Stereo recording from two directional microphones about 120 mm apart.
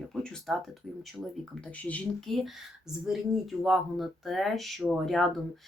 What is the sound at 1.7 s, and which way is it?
Speech, 10° left (ahead or behind).